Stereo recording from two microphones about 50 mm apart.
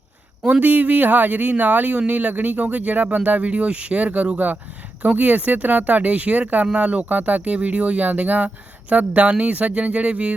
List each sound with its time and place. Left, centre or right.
0.6 s speech: right